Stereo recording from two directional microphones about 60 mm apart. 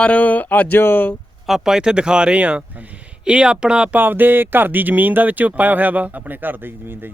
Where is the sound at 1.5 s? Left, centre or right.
Centre.